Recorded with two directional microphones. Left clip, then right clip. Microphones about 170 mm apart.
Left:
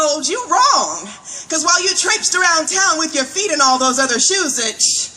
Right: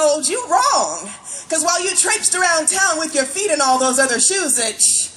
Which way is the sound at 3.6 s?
15° right (ahead or behind).